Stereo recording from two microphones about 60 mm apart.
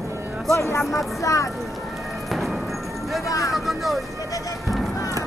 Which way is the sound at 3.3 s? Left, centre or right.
Left.